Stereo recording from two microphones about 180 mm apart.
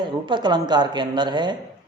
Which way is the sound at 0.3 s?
25° right (ahead or behind).